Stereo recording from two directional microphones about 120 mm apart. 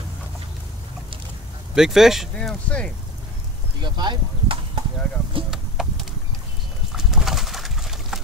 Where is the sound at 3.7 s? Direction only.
40° right (ahead or behind).